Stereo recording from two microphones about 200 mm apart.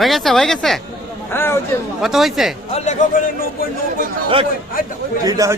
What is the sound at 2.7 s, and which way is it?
Speech, 35° left (ahead or behind).